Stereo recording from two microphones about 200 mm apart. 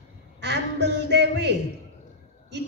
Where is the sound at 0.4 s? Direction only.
55° right (ahead or behind).